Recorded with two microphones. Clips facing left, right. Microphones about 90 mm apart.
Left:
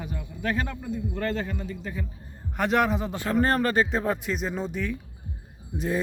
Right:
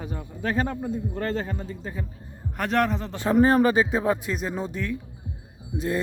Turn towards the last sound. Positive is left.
turn(degrees=0)  # may be behind; listen again after turning